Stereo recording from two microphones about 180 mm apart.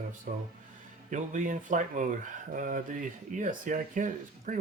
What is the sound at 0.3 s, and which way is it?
Speech, 45° right (ahead or behind).